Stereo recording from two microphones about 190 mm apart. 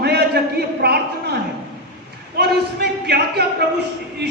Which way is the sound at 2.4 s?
60° right (ahead or behind).